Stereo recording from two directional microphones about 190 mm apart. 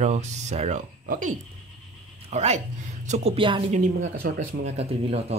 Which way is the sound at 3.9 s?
80° right.